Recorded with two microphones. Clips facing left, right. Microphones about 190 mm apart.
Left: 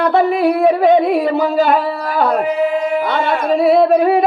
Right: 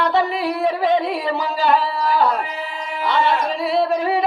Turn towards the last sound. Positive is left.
turn(degrees=55)  # may be behind; listen again after turning